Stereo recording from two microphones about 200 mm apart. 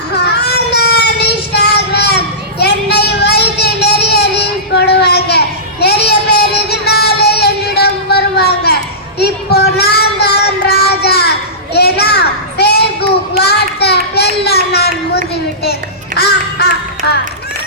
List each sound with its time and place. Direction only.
0.2 s baby cry: 55° left (ahead or behind)
1.0 s child singing: 55° left (ahead or behind)
4.9 s a sound: 55° left (ahead or behind)
5.8 s child singing: 55° left (ahead or behind)
13.4 s a sound: 55° left (ahead or behind)
16.1 s music: 55° left (ahead or behind)